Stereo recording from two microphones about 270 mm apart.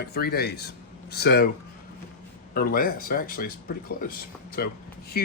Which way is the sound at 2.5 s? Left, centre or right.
Left.